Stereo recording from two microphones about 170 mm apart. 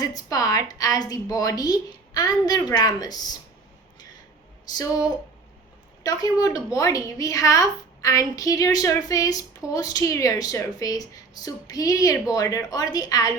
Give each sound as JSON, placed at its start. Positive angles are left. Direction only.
{"t": 0.0, "sound": "a woman's voice", "side_deg": 20}
{"t": 4.8, "sound": "a woman's voice", "side_deg": 20}